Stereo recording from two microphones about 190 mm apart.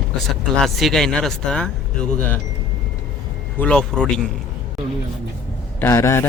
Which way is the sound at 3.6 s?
5° left (ahead or behind).